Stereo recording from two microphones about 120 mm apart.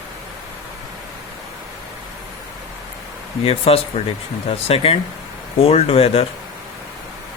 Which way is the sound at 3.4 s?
55° left (ahead or behind).